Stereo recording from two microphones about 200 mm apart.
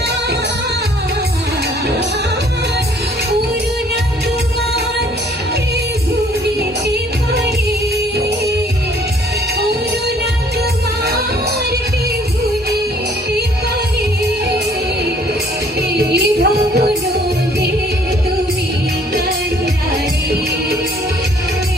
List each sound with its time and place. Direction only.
16.0 s music: 55° right (ahead or behind)